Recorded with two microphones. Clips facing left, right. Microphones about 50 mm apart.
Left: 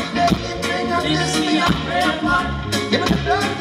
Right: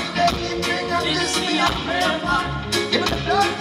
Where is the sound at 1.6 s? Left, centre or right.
Centre.